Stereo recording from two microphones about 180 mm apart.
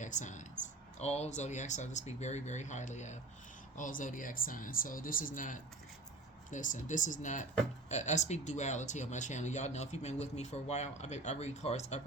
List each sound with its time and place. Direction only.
0.0 s speech: 45° left (ahead or behind)